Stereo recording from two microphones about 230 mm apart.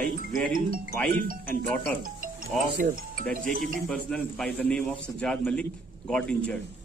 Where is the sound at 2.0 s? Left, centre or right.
Right.